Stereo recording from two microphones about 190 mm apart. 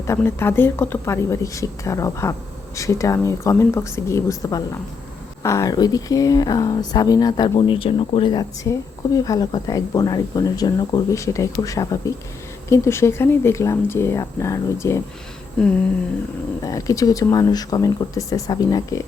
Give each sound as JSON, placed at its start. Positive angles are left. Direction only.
{"t": 0.1, "sound": "speech", "side_deg": 10}
{"t": 15.5, "sound": "humming", "side_deg": 5}
{"t": 16.6, "sound": "speech", "side_deg": 20}